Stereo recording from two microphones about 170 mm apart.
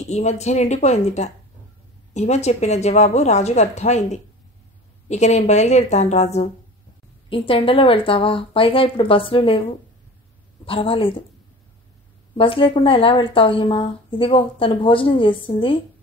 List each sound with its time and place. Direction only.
0.1 s a woman's voice: 40° left (ahead or behind)
12.4 s a woman's voice: 30° left (ahead or behind)